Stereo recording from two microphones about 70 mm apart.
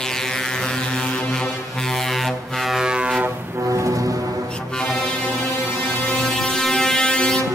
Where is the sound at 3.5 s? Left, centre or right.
Right.